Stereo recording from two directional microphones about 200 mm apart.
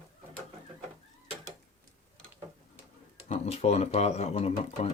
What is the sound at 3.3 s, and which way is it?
Speech, 35° left (ahead or behind).